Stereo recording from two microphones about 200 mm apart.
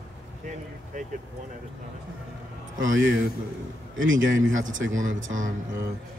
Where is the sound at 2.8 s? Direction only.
70° right (ahead or behind).